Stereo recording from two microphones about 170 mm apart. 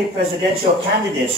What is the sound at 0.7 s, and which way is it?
Speech, 45° right (ahead or behind).